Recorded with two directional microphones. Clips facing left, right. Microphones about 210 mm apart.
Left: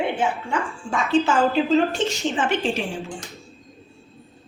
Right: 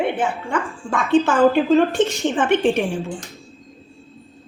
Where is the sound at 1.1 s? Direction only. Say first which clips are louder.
Right 4 dB; 55° right (ahead or behind).